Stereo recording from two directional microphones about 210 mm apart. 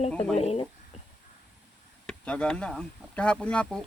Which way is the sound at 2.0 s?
5° left (ahead or behind).